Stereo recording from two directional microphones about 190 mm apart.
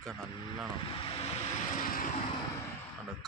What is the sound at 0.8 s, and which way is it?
Speech, 30° left (ahead or behind).